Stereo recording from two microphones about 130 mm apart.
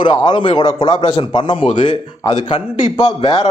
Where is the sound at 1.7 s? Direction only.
75° left (ahead or behind).